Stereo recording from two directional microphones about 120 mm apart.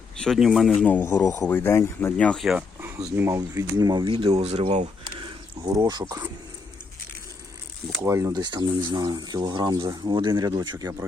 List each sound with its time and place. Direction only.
0.2 s speech: centre (ahead or behind)
0.9 s speech: 15° left (ahead or behind)
1.1 s speech: 30° left (ahead or behind)
1.5 s speech: 15° left (ahead or behind)
2.1 s speech: 5° left (ahead or behind)
2.8 s speech: 20° right (ahead or behind)
4.1 s speech: 55° right (ahead or behind)
5.2 s speech: 35° right (ahead or behind)
8.0 s speech: 25° right (ahead or behind)
8.3 s speech: 35° right (ahead or behind)